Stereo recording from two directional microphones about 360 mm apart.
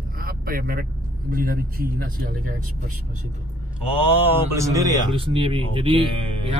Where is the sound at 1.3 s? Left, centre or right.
Right.